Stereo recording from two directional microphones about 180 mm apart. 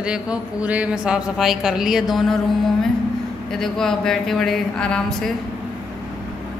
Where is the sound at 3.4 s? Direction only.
5° left (ahead or behind).